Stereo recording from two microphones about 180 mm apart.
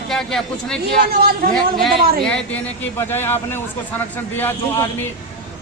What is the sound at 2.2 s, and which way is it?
A man's voice, 5° left (ahead or behind).